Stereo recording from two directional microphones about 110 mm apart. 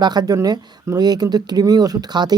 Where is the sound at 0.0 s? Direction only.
40° right (ahead or behind).